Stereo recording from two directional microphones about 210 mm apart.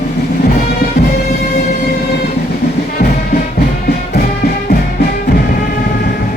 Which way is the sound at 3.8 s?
45° left (ahead or behind).